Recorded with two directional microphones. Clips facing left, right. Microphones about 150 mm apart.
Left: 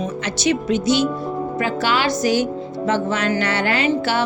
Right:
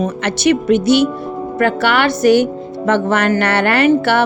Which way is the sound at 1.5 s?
60° right (ahead or behind).